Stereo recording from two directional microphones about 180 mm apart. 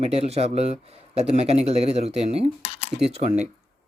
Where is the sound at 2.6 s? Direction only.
35° left (ahead or behind).